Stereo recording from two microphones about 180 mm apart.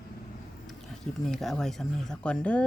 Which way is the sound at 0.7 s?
Centre (ahead or behind).